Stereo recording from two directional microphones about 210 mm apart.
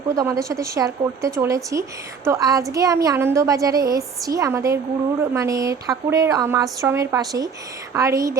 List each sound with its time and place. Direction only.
0.1 s a woman's voice: 15° right (ahead or behind)